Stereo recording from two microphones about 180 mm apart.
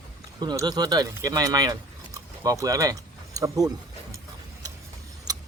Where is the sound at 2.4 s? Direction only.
20° right (ahead or behind).